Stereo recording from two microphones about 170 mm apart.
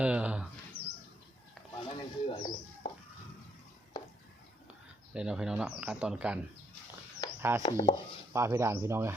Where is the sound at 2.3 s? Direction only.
30° left (ahead or behind).